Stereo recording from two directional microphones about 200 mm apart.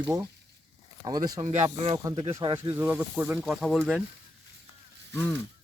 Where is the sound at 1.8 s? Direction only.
30° right (ahead or behind).